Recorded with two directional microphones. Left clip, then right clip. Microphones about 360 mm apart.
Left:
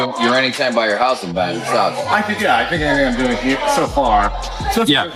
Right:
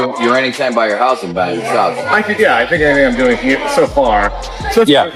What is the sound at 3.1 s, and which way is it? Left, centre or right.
Speech, centre.